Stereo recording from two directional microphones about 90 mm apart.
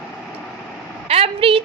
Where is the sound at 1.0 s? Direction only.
90° right.